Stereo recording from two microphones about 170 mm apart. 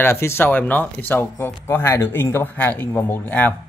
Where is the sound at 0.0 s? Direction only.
15° left (ahead or behind).